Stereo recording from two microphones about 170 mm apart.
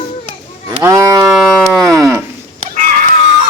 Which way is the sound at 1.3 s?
Centre (ahead or behind).